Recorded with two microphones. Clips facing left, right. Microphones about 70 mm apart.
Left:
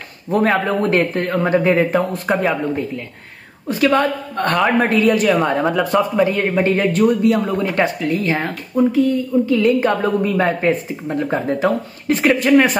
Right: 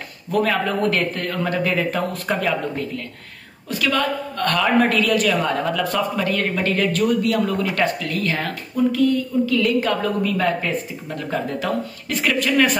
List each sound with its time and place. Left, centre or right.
0.3 s speech: left
3.6 s speech: left